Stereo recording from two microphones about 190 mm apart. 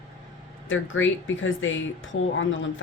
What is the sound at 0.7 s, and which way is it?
Speech, 90° left.